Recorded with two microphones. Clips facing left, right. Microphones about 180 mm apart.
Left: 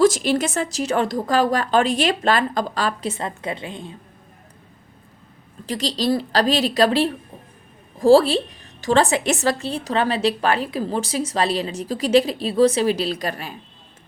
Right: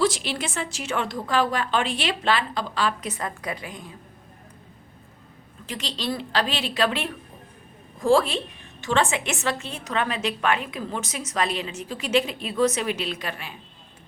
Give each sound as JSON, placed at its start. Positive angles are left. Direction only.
{"t": 0.0, "sound": "a woman's voice", "side_deg": 45}
{"t": 3.1, "sound": "a woman's voice", "side_deg": 25}
{"t": 5.6, "sound": "a woman's voice", "side_deg": 35}